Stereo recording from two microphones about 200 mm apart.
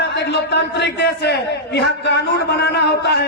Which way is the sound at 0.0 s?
55° left (ahead or behind).